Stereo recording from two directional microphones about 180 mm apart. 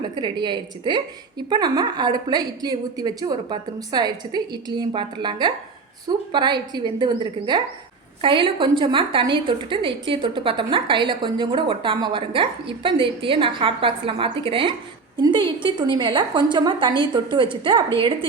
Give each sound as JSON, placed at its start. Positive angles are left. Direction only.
{"t": 0.2, "sound": "a woman's voice", "side_deg": -25}